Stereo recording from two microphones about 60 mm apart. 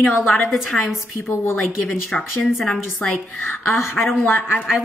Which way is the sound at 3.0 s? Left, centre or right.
Left.